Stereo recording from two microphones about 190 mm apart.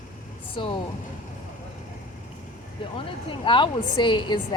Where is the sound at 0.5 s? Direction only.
25° left (ahead or behind).